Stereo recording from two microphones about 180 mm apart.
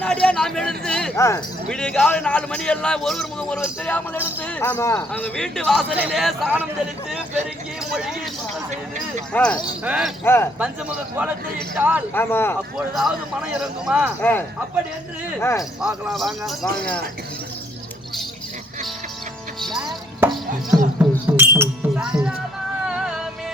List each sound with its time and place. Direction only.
0.0 s speech: 5° left (ahead or behind)
1.1 s speech: 15° left (ahead or behind)
1.7 s a man's voice: 5° left (ahead or behind)
7.9 s a man's voice: centre (ahead or behind)
9.3 s a man's voice: 5° left (ahead or behind)
9.8 s a man's voice: 5° right (ahead or behind)
10.2 s a man's voice: 15° left (ahead or behind)
10.6 s a man's voice: 5° right (ahead or behind)
12.1 s a man's voice: 10° left (ahead or behind)
12.7 s a man's voice: centre (ahead or behind)
14.2 s a man's voice: 10° left (ahead or behind)
15.8 s a man's voice: centre (ahead or behind)
19.5 s music: centre (ahead or behind)